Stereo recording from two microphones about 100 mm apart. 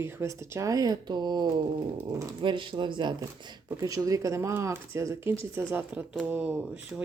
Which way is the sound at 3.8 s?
35° right (ahead or behind).